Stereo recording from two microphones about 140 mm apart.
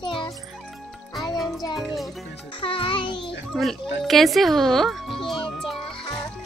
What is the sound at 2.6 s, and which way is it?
Speech, 40° left (ahead or behind).